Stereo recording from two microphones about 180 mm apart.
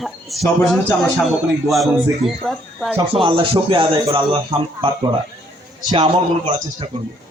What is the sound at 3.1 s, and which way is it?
Speech, 30° right (ahead or behind).